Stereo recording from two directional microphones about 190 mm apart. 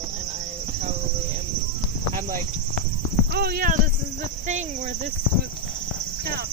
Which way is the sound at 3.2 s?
55° right (ahead or behind).